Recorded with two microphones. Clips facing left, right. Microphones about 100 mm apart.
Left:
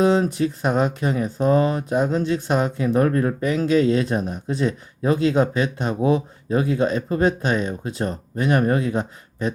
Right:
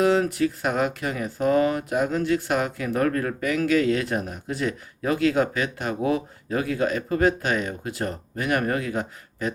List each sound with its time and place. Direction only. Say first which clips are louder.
0.0 s speech: left 2 dB; 25° left (ahead or behind)